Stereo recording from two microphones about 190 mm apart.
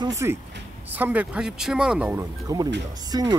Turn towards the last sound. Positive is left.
turn(degrees=-20)  # may be behind; listen again after turning